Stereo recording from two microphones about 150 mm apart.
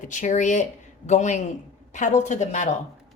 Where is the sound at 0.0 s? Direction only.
55° left (ahead or behind).